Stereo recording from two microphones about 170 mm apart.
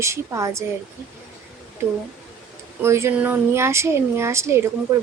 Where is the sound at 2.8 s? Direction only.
15° right (ahead or behind).